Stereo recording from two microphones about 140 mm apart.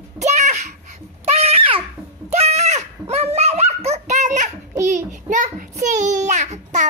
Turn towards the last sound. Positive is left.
turn(degrees=-55)  # may be behind; listen again after turning